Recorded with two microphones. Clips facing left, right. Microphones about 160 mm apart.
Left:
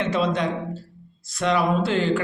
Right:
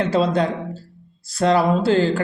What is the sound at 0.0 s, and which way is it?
Speech, 35° right (ahead or behind).